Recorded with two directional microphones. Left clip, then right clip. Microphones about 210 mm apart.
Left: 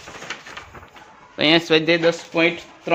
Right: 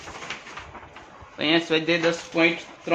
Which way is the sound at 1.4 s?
50° left (ahead or behind).